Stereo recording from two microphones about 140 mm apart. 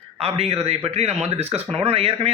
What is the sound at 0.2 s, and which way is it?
Speech, 45° right (ahead or behind).